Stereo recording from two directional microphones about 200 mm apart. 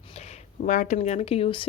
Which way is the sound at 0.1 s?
35° left (ahead or behind).